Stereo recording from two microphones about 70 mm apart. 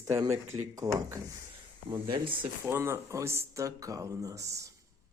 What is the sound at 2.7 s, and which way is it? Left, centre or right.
Speech, right.